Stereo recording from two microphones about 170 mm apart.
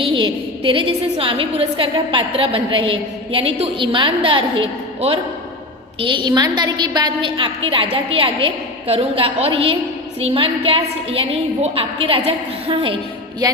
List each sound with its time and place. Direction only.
0.0 s a woman's voice: 30° right (ahead or behind)